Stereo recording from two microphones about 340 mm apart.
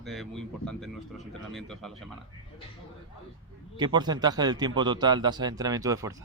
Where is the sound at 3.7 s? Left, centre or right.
Centre.